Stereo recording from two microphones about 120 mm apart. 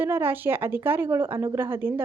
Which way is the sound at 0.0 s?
15° right (ahead or behind).